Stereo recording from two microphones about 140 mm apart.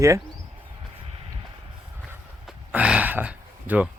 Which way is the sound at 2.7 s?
10° right (ahead or behind).